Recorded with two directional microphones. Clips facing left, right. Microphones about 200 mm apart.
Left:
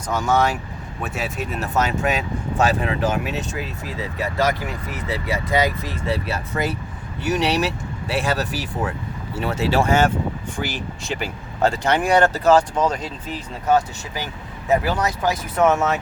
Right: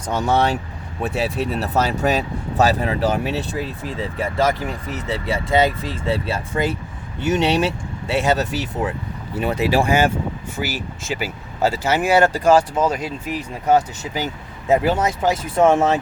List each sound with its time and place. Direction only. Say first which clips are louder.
0.1 s speech: right 1 dB; 30° right (ahead or behind)